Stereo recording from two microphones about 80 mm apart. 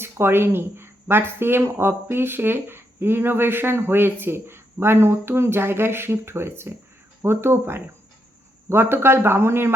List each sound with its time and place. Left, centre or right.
0.0 s speech: right